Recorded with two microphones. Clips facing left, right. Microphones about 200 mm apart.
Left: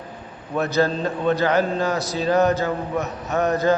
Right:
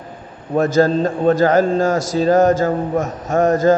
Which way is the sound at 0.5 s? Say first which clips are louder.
Right 6 dB; 45° right (ahead or behind).